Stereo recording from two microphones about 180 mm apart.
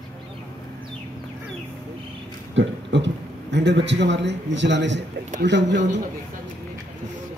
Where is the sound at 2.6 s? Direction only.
85° right.